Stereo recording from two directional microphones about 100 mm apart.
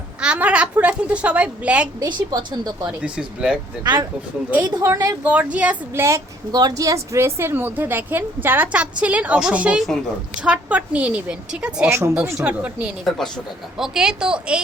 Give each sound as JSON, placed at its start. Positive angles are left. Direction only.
{"t": 0.2, "sound": "speech", "side_deg": -10}
{"t": 2.0, "sound": "speech", "side_deg": -45}
{"t": 3.0, "sound": "speech", "side_deg": -10}
{"t": 4.7, "sound": "speech", "side_deg": -35}
{"t": 5.2, "sound": "speech", "side_deg": -15}
{"t": 5.9, "sound": "a woman's voice", "side_deg": -30}
{"t": 6.5, "sound": "a woman's voice", "side_deg": -40}
{"t": 11.9, "sound": "a woman's voice", "side_deg": -25}
{"t": 12.4, "sound": "speech", "side_deg": -10}
{"t": 13.1, "sound": "speech", "side_deg": 5}